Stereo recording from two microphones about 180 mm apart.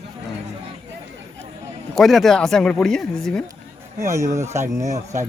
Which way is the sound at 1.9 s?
Centre (ahead or behind).